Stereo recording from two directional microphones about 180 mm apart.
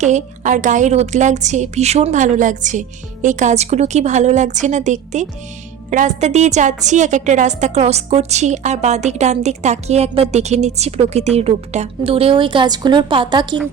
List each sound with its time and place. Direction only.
0.0 s a woman's voice: 40° right (ahead or behind); by 13.6 s 25° right (ahead or behind)